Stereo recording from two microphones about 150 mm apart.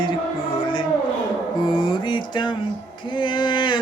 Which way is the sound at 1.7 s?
30° left (ahead or behind).